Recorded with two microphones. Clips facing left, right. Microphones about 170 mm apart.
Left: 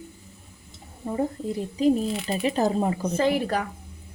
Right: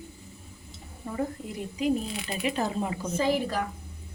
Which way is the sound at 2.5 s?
40° left (ahead or behind).